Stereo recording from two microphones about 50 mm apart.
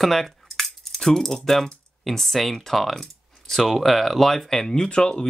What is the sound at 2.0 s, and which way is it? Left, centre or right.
Speech, centre.